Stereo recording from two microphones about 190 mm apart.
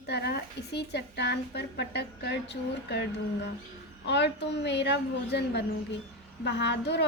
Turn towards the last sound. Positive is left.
turn(degrees=65)  # may be behind; listen again after turning